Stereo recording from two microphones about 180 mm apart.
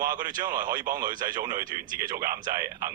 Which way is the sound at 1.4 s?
20° right (ahead or behind).